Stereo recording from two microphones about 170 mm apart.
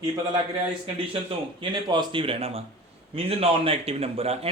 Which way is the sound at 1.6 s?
30° right (ahead or behind).